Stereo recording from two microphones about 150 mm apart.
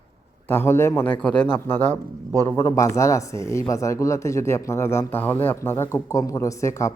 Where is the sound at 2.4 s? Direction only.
20° left (ahead or behind).